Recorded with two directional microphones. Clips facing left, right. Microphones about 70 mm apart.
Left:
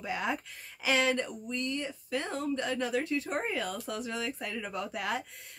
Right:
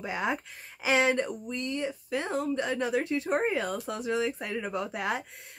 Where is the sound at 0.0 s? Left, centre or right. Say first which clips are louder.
Right 2 dB; right.